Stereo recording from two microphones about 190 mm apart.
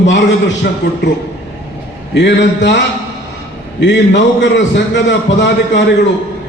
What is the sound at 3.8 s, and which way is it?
A man's voice, 70° left (ahead or behind).